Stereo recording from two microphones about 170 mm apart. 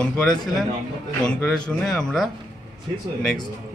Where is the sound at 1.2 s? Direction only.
5° left (ahead or behind).